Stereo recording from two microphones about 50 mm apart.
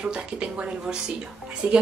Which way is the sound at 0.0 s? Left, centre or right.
Centre.